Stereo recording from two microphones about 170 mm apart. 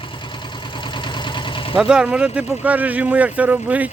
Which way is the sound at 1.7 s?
5° right (ahead or behind).